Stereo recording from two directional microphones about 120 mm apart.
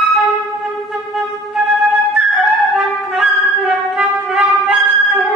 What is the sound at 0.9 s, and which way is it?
Flute, centre (ahead or behind).